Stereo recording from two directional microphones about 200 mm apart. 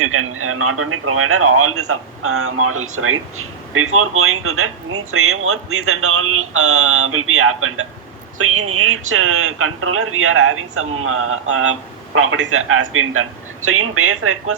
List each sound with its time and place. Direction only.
0.0 s speech: 90° right